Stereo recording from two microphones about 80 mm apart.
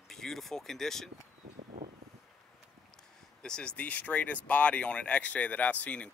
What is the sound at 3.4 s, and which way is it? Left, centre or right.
Speech, centre.